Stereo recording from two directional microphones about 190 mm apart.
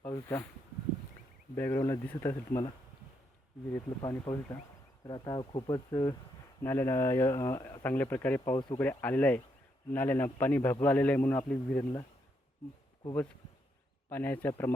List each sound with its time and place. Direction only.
0.0 s a sound: 15° left (ahead or behind)
1.5 s speech: 10° left (ahead or behind)
3.7 s speech: 10° left (ahead or behind)
5.0 s speech: 25° left (ahead or behind)
8.5 s speech: 25° left (ahead or behind)
8.8 s speech: 10° left (ahead or behind)
14.1 s speech: 10° left (ahead or behind)